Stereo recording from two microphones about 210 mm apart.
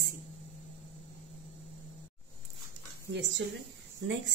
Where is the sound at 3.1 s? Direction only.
55° right (ahead or behind).